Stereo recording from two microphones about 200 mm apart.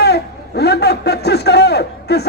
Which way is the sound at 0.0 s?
55° left (ahead or behind).